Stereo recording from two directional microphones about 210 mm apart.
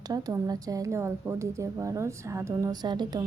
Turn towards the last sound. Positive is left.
turn(degrees=-20)  # may be behind; listen again after turning